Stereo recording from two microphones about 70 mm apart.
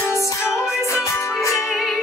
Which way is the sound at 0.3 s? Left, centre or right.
Left.